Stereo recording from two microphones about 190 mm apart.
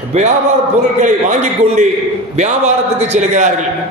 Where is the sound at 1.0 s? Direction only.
40° right (ahead or behind).